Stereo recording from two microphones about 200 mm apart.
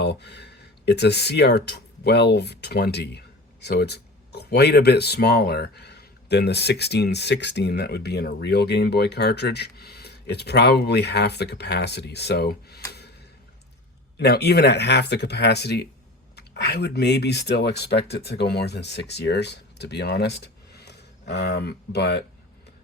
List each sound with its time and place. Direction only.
0.0 s speech: 55° left (ahead or behind)
14.2 s speech: 55° left (ahead or behind)